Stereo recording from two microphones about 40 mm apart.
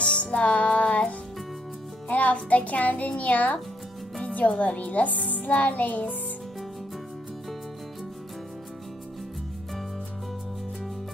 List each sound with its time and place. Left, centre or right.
0.0 s music: left
2.0 s a child's voice: left